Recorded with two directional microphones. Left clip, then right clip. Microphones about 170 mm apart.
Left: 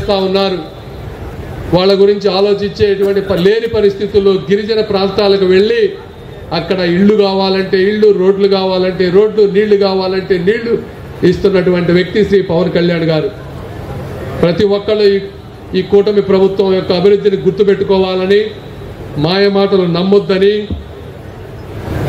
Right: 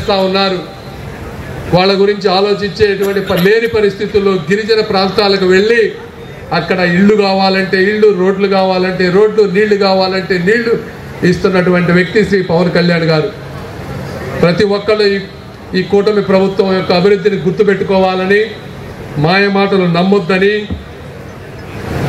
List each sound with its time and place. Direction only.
0.1 s speech: 15° right (ahead or behind)
1.7 s a man's voice: 15° right (ahead or behind)
14.4 s a man's voice: 20° right (ahead or behind)